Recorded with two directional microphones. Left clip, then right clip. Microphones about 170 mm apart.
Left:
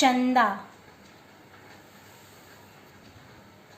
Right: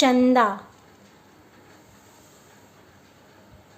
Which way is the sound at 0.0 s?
70° right (ahead or behind).